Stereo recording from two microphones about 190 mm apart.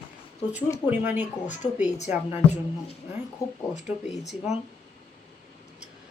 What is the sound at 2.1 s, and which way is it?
Speech, 10° right (ahead or behind).